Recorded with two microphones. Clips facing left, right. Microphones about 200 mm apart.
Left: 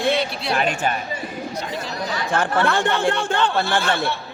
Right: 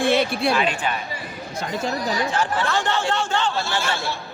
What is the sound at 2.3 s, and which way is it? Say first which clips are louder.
A man's voice: left 3 dB; 55° left (ahead or behind).